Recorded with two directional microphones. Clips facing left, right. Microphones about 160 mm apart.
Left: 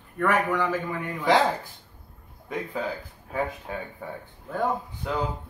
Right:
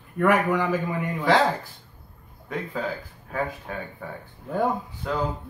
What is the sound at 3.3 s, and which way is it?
Speech, 15° left (ahead or behind).